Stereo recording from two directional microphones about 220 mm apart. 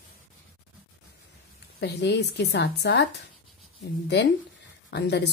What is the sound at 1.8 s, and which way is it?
Speech, 50° left (ahead or behind).